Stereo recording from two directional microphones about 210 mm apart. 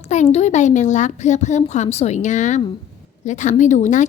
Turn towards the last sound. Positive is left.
turn(degrees=35)  # may be behind; listen again after turning